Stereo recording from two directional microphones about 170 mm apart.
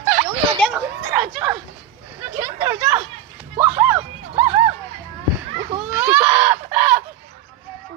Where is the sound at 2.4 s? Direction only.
15° right (ahead or behind).